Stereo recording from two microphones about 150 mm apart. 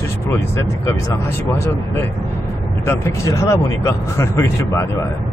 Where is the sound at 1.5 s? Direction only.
15° left (ahead or behind).